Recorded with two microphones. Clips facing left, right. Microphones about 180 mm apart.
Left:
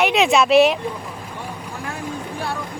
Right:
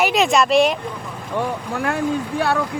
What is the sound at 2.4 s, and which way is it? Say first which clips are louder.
Speech: right 8 dB; 70° right (ahead or behind).